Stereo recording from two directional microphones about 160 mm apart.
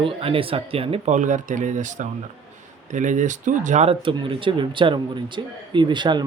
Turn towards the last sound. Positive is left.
turn(degrees=-30)  # may be behind; listen again after turning